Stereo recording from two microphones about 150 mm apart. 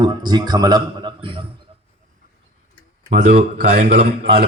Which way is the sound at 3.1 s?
55° right (ahead or behind).